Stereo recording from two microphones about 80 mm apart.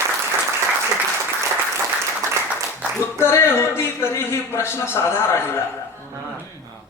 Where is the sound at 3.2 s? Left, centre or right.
Left.